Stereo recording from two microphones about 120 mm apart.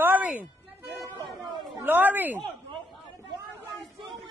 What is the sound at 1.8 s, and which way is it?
Speech, 15° right (ahead or behind).